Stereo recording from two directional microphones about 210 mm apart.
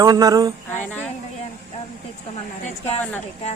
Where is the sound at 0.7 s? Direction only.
10° left (ahead or behind).